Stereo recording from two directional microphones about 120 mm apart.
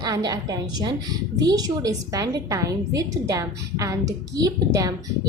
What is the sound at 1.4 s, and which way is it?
A woman's voice, 35° right (ahead or behind).